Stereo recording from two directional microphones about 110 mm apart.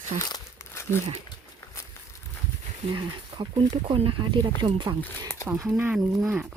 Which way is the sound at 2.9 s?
45° right (ahead or behind).